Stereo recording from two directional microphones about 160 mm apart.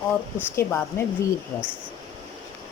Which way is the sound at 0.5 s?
15° left (ahead or behind).